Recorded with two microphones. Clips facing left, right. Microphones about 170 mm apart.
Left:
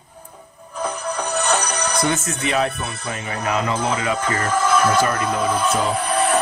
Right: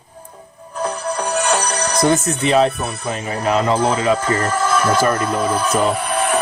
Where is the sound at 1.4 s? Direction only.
10° right (ahead or behind).